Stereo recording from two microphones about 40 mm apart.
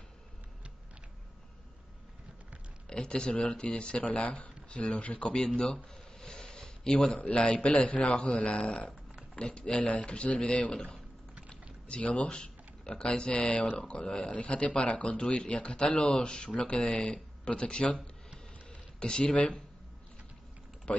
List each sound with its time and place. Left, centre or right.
2.9 s speech: left
6.2 s a sound: centre
7.7 s speech: left
12.0 s speech: left